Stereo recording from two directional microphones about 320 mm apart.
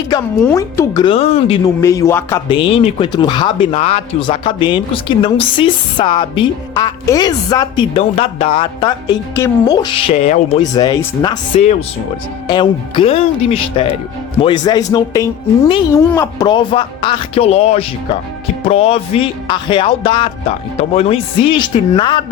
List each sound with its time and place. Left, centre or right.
0.1 s speech: centre